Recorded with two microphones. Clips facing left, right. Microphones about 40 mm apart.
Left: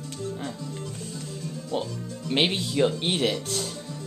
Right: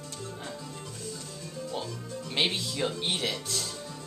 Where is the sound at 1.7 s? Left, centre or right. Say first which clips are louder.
Left 7 dB; left; by 3.7 s centre.